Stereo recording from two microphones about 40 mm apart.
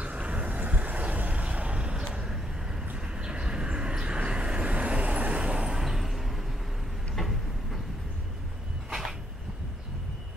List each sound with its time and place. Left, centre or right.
0.0 s vehicle: right
2.2 s vehicle: centre
3.0 s vehicle: right
5.7 s a sound: centre
7.2 s vehicle: centre